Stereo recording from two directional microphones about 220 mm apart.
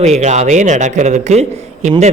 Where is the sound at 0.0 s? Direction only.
30° right (ahead or behind).